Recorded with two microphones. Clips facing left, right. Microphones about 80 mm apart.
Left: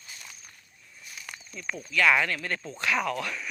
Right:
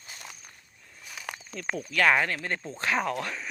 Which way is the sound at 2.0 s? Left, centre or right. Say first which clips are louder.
Even; right.